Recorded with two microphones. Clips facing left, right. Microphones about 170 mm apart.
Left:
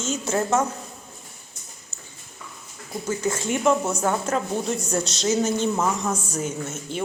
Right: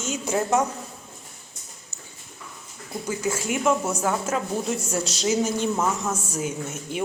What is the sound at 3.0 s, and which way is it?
Speech, 10° right (ahead or behind).